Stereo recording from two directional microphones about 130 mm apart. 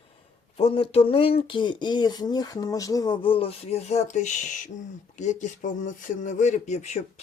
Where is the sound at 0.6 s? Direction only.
50° left (ahead or behind).